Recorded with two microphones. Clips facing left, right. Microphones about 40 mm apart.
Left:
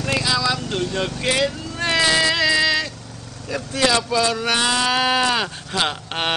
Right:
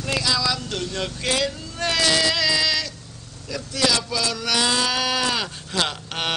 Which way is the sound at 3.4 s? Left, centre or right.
Left.